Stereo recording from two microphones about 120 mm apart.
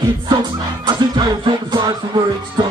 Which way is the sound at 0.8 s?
40° right (ahead or behind).